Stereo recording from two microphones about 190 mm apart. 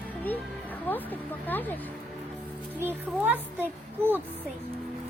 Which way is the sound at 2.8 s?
10° right (ahead or behind).